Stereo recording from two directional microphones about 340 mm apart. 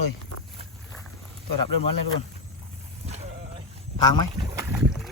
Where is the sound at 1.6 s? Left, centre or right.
Left.